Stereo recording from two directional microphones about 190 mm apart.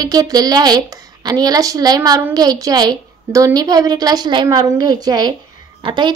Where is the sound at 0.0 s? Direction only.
20° right (ahead or behind).